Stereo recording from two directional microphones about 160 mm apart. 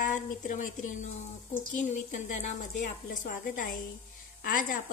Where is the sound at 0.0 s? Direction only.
50° left (ahead or behind).